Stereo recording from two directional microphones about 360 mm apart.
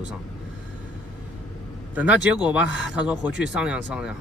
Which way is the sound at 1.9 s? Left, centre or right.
Centre.